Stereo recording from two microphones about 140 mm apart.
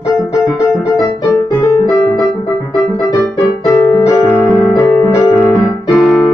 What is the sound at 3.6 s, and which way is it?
Piano, 20° left (ahead or behind).